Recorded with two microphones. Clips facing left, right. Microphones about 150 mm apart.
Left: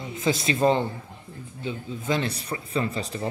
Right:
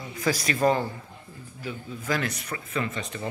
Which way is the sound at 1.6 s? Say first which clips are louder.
Left 3 dB; 25° left (ahead or behind).